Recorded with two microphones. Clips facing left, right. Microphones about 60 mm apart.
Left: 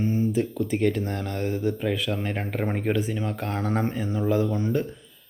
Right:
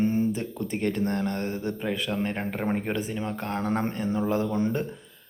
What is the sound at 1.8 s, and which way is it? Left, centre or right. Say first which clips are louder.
Speech: left 1 dB; centre.